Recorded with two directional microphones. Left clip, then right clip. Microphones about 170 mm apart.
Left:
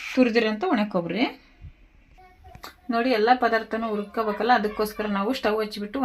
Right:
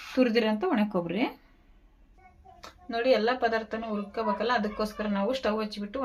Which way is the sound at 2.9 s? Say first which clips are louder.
Left 4 dB; 50° left (ahead or behind).